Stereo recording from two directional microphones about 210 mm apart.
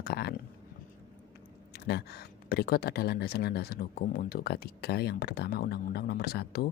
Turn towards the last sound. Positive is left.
turn(degrees=50)  # may be behind; listen again after turning